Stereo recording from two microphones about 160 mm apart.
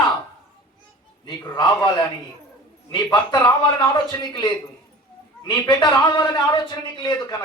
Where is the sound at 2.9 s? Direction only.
30° left (ahead or behind).